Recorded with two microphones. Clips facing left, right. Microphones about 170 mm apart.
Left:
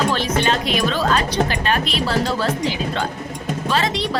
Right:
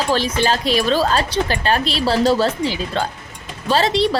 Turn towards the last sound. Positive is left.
turn(degrees=-30)  # may be behind; listen again after turning